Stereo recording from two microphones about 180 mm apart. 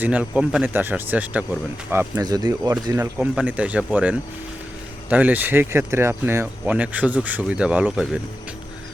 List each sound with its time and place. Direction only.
0.0 s speech: 10° right (ahead or behind)
3.0 s speech: 10° right (ahead or behind)